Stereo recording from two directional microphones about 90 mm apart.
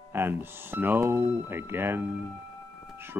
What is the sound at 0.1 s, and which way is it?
Speech, 25° right (ahead or behind).